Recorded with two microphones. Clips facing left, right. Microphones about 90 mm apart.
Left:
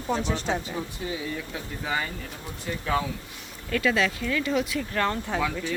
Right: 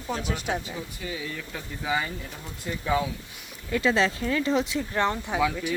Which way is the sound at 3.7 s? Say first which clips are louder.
Right 1 dB; 25° right (ahead or behind).